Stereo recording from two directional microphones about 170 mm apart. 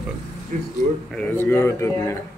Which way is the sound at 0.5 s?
50° right (ahead or behind).